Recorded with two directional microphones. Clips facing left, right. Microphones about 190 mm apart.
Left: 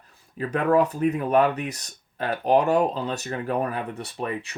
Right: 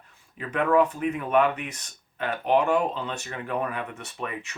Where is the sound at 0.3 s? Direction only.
40° left (ahead or behind).